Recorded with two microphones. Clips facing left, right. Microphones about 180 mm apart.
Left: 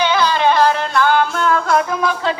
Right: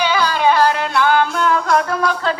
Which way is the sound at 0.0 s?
10° right (ahead or behind).